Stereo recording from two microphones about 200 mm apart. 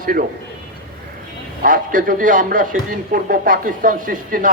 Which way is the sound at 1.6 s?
45° right (ahead or behind).